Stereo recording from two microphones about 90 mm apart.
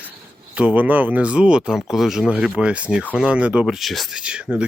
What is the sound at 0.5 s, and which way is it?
Speech, 15° right (ahead or behind).